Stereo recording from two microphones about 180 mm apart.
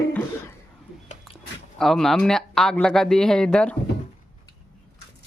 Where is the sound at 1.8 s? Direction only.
Centre (ahead or behind).